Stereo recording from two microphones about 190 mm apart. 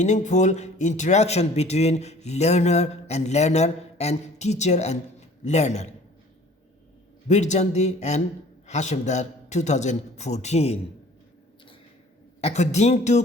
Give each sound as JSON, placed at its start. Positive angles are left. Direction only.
{"t": 0.0, "sound": "speech", "side_deg": 40}
{"t": 7.3, "sound": "speech", "side_deg": 35}
{"t": 12.4, "sound": "speech", "side_deg": 35}